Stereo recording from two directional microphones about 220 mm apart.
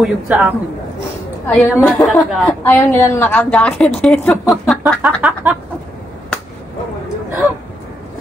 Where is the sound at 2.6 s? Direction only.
10° left (ahead or behind).